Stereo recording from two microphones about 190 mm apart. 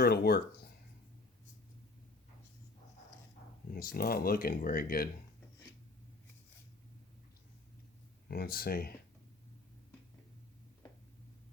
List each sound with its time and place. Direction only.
0.0 s speech: 55° left (ahead or behind)
3.7 s speech: 50° left (ahead or behind)
8.3 s speech: 55° left (ahead or behind)